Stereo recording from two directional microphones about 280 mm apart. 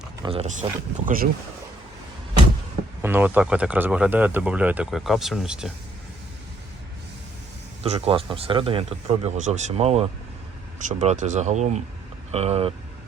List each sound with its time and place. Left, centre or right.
0.2 s speech: right
3.0 s speech: centre
7.9 s speech: centre